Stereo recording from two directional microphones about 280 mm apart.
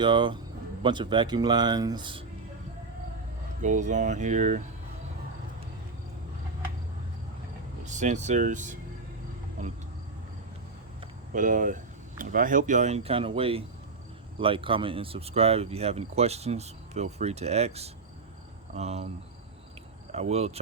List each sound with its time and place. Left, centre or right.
0.0 s speech: centre
3.6 s speech: right
7.9 s speech: right
11.3 s speech: right
20.1 s speech: right